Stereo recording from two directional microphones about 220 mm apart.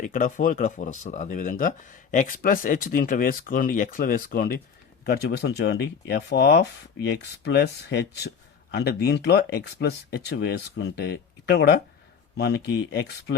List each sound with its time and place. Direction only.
0.0 s speech: 35° left (ahead or behind)